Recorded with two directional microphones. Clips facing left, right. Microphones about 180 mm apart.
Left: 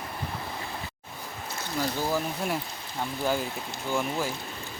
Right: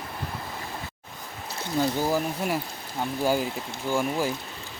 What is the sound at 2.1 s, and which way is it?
Speech, 10° right (ahead or behind).